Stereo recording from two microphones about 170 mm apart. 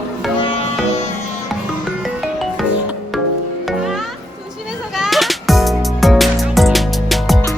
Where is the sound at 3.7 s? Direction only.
Centre (ahead or behind).